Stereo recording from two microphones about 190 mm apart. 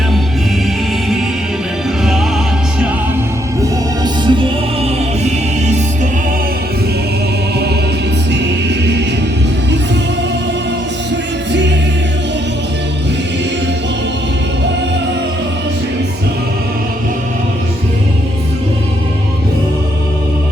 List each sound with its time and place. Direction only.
3.6 s music: 25° right (ahead or behind)
5.2 s music: 35° right (ahead or behind)